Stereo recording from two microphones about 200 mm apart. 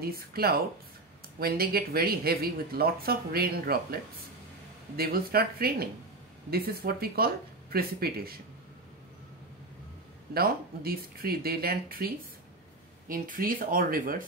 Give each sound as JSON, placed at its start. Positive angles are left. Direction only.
{"t": 0.0, "sound": "speech", "side_deg": -50}
{"t": 10.3, "sound": "speech", "side_deg": -50}
{"t": 13.1, "sound": "speech", "side_deg": -45}